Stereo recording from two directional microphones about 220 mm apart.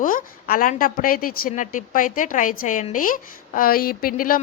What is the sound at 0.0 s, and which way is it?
Speech, 40° left (ahead or behind).